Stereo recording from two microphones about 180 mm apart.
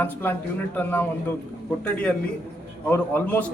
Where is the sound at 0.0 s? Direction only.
10° left (ahead or behind).